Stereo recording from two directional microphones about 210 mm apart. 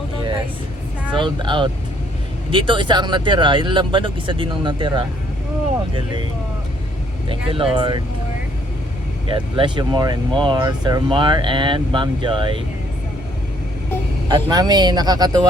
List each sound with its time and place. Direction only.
1.1 s speech: 20° right (ahead or behind)
7.3 s speech: 25° right (ahead or behind)
9.2 s speech: 25° right (ahead or behind)
14.3 s speech: 20° right (ahead or behind)